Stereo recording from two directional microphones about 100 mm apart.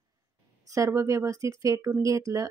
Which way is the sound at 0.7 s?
30° right (ahead or behind).